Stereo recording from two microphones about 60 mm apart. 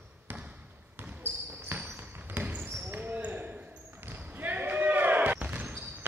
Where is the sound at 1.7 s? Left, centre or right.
Right.